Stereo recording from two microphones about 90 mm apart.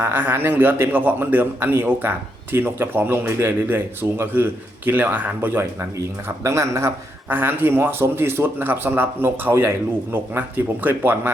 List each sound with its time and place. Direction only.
0.0 s a man's voice: 25° right (ahead or behind)